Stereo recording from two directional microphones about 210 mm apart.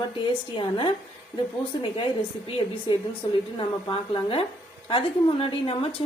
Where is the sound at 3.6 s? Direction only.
25° left (ahead or behind).